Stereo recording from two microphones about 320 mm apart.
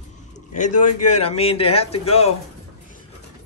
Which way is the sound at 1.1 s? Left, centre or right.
Centre.